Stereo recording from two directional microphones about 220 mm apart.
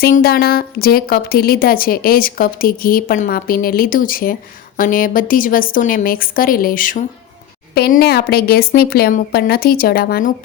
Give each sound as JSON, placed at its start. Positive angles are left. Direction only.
{"t": 0.0, "sound": "a woman's voice", "side_deg": 45}